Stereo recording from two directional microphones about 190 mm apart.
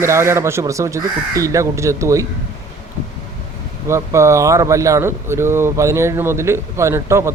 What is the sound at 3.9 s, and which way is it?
Speech, 15° right (ahead or behind).